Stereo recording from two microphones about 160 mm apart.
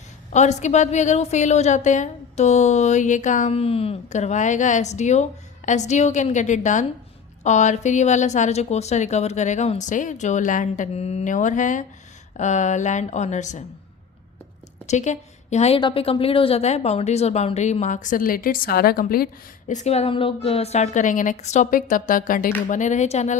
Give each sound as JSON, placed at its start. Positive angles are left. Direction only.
{"t": 0.3, "sound": "speech", "side_deg": 45}
{"t": 14.8, "sound": "a woman's voice", "side_deg": 45}
{"t": 15.8, "sound": "speech", "side_deg": 35}